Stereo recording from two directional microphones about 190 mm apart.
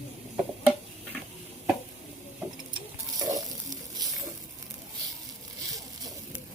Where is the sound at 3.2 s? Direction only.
20° right (ahead or behind).